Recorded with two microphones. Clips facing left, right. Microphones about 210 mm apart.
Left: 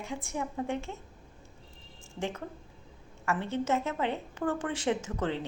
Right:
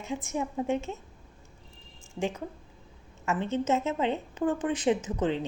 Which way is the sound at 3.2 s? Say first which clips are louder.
Right 3 dB; 20° right (ahead or behind).